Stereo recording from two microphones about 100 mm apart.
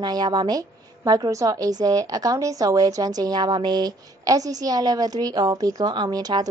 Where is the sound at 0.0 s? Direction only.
45° right (ahead or behind).